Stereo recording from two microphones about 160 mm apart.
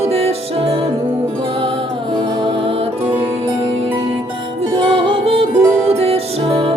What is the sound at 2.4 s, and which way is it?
Music, 35° right (ahead or behind).